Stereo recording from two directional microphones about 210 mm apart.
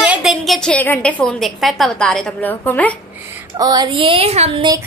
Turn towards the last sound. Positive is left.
turn(degrees=-30)  # may be behind; listen again after turning